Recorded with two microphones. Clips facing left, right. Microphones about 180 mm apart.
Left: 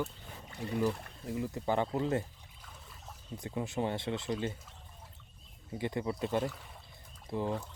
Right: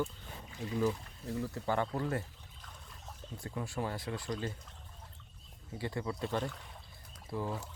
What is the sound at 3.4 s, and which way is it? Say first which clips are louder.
Speech: left 4 dB; 20° left (ahead or behind).